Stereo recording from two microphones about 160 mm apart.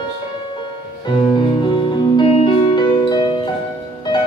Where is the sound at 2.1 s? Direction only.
30° left (ahead or behind).